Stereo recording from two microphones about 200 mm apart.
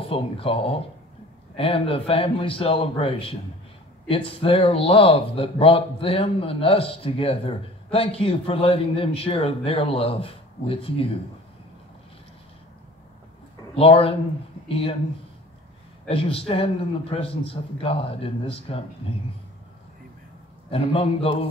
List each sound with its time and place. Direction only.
0.0 s speech: 25° left (ahead or behind)
13.7 s speech: 30° left (ahead or behind)
16.1 s speech: 30° left (ahead or behind)
20.7 s speech: 30° left (ahead or behind)